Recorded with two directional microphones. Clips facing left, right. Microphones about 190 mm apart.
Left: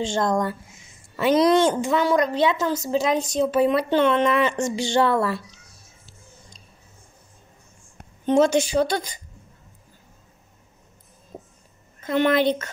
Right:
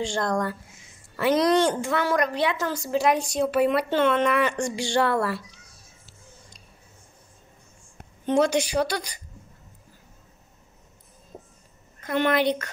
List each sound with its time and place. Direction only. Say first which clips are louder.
0.0 s a woman's voice: left 3 dB; 20° left (ahead or behind)
8.3 s a woman's voice: left 3 dB; 25° left (ahead or behind)
12.0 s a woman's voice: left 3 dB; 25° left (ahead or behind)